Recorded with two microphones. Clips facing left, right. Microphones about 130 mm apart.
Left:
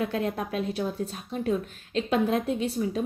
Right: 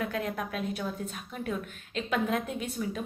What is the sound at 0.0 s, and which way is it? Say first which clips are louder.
A woman's voice: left 4 dB; 30° left (ahead or behind).